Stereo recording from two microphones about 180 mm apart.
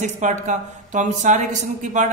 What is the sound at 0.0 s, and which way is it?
A woman's voice, 40° right (ahead or behind).